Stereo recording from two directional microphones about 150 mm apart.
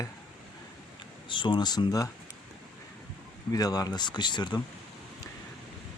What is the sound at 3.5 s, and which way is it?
Speech, 25° left (ahead or behind).